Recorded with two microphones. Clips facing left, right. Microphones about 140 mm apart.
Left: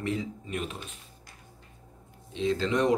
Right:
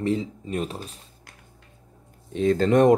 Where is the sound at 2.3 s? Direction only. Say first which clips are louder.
Right 8 dB; 50° right (ahead or behind).